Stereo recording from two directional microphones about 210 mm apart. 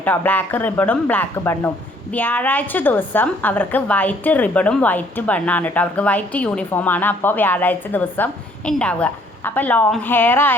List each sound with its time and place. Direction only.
0.0 s a woman's voice: 10° left (ahead or behind)